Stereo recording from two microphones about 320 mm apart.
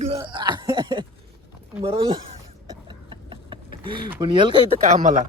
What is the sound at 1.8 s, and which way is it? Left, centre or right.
Speech, centre.